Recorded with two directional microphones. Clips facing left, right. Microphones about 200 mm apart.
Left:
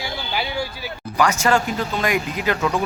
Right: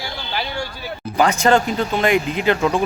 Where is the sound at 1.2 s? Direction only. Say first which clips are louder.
Right 3 dB; 35° right (ahead or behind).